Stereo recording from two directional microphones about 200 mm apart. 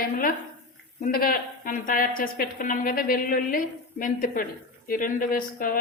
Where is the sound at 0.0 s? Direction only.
45° left (ahead or behind).